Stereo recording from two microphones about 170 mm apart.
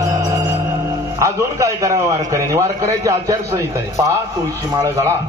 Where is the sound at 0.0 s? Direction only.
20° right (ahead or behind).